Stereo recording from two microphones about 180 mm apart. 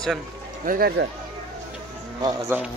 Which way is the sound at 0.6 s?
55° right (ahead or behind).